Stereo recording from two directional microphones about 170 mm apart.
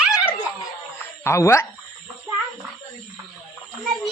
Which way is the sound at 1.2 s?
15° left (ahead or behind).